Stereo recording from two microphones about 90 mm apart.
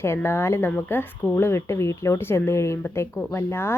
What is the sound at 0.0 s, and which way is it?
Speech, 25° left (ahead or behind).